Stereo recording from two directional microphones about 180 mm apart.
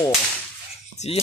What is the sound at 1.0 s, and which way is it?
Speech, 40° left (ahead or behind).